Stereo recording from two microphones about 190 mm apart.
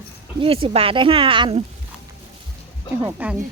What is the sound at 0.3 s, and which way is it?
Speech, 30° right (ahead or behind).